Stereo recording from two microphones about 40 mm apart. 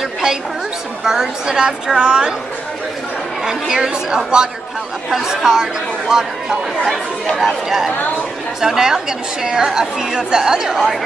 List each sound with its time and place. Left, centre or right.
1.0 s a woman's voice: centre
3.4 s a woman's voice: centre